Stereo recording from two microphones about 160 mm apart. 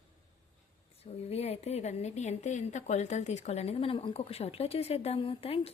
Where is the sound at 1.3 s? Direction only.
40° left (ahead or behind).